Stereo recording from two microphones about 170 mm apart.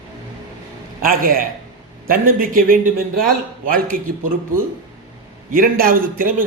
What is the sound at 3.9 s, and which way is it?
Speech, 55° right (ahead or behind).